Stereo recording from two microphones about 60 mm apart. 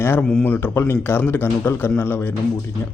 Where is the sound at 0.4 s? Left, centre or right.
Left.